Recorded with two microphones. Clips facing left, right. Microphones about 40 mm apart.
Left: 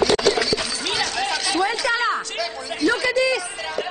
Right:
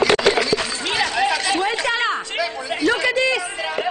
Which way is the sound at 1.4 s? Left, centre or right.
Right.